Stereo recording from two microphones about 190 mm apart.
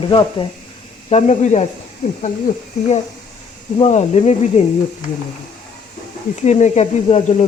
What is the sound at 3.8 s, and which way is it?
Speech, 35° left (ahead or behind).